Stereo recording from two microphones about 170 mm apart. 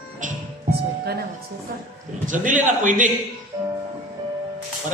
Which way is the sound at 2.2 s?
50° right (ahead or behind).